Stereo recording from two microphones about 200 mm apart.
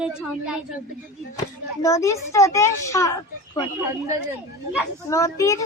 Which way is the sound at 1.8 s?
15° left (ahead or behind).